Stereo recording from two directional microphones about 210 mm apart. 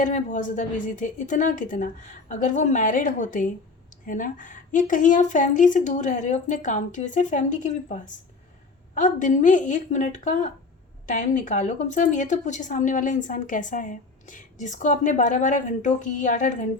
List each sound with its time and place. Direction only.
0.0 s speech: 35° left (ahead or behind)